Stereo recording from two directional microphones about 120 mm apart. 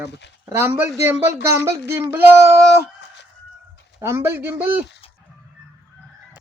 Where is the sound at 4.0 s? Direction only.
25° right (ahead or behind).